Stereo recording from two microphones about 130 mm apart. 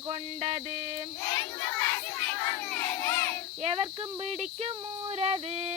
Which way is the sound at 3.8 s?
55° right (ahead or behind).